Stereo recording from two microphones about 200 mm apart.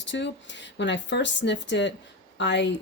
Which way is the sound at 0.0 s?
65° left (ahead or behind).